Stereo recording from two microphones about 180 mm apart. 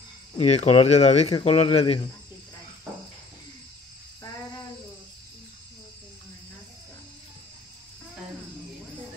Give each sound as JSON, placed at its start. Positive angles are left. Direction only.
{"t": 0.4, "sound": "speech", "side_deg": 35}